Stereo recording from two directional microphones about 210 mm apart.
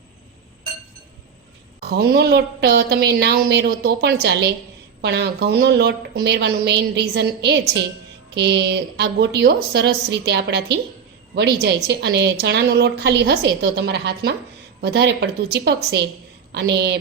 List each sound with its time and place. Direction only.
1.8 s speech: 50° right (ahead or behind)